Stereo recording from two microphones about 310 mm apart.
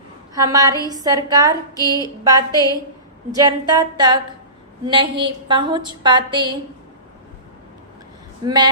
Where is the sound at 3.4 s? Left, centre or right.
Centre.